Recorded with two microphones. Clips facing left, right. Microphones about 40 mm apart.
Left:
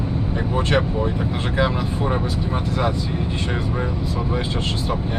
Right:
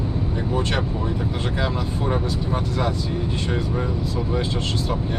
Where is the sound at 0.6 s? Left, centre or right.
Left.